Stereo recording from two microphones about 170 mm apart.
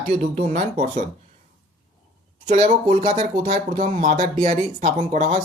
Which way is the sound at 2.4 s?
45° right (ahead or behind).